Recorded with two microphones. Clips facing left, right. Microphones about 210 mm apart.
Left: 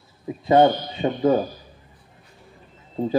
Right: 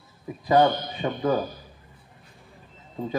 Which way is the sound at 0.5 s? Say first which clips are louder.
Left 4 dB; 25° left (ahead or behind).